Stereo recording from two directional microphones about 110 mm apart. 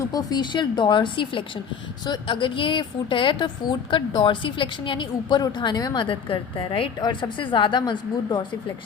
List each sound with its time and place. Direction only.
0.0 s a woman's voice: 35° left (ahead or behind)